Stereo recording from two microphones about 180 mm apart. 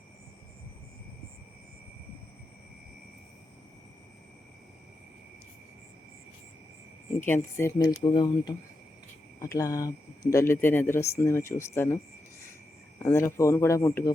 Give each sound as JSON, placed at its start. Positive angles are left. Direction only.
{"t": 7.2, "sound": "speech", "side_deg": 15}
{"t": 13.0, "sound": "speech", "side_deg": 15}